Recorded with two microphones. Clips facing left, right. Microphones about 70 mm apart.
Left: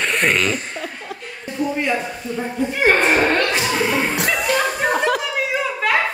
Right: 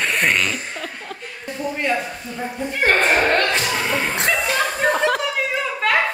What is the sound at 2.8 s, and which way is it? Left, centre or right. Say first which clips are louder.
Speech: left 1 dB; centre.